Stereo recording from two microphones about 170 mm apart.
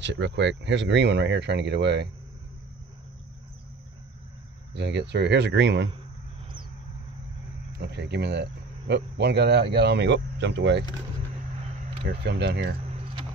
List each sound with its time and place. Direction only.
0.0 s speech: 90° right
4.7 s speech: 90° right
7.8 s speech: 90° right
12.0 s speech: 90° right
12.9 s a sound: 35° right (ahead or behind)